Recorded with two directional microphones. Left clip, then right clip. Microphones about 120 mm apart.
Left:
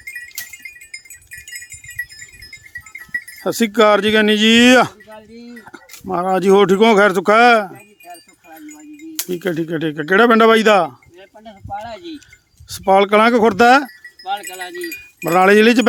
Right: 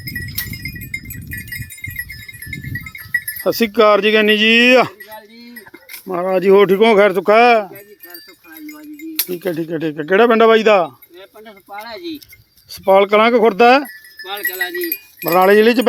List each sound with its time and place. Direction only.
3.4 s speech: 25° left (ahead or behind); by 7.7 s 50° left (ahead or behind)
9.2 s speech: 50° left (ahead or behind)
12.7 s speech: 35° left (ahead or behind)
15.3 s speech: 50° left (ahead or behind)